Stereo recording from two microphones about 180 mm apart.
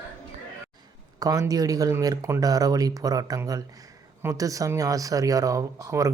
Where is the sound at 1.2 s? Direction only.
20° right (ahead or behind).